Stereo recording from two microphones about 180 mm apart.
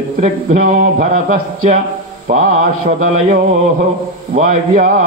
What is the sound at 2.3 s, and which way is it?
A man's voice, 45° right (ahead or behind).